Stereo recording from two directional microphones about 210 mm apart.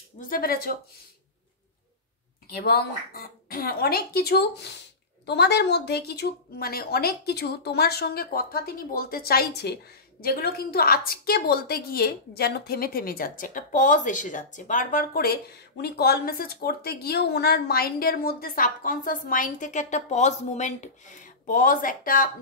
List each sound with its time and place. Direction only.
0.2 s speech: 45° left (ahead or behind)
2.5 s speech: 50° left (ahead or behind)